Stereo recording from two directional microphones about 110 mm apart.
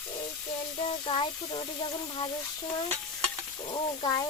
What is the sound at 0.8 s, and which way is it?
Speech, 55° left (ahead or behind).